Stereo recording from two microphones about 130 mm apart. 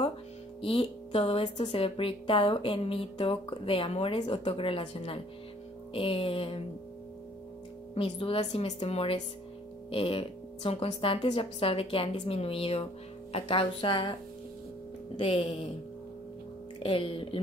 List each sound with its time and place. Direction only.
0.6 s speech: 45° left (ahead or behind)
7.9 s a woman's voice: 45° left (ahead or behind)
15.1 s speech: 45° left (ahead or behind)
16.8 s speech: 45° left (ahead or behind)